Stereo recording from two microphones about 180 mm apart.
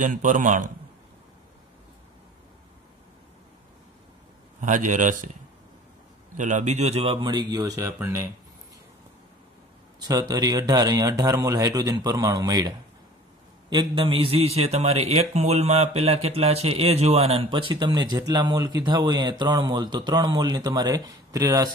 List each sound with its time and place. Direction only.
0.0 s speech: 45° right (ahead or behind)
4.6 s a man's voice: 45° right (ahead or behind); by 8.3 s 15° right (ahead or behind)
9.9 s a man's voice: 20° right (ahead or behind)